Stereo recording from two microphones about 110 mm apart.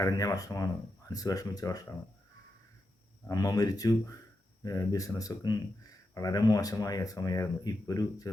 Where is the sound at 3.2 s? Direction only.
35° left (ahead or behind).